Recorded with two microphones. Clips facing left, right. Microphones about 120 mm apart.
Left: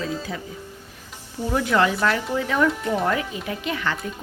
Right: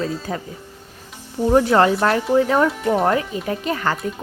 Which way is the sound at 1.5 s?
40° right (ahead or behind).